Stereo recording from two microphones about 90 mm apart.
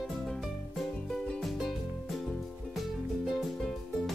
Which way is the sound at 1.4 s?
Centre (ahead or behind).